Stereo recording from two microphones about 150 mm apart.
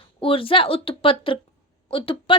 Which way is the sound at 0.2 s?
35° left (ahead or behind).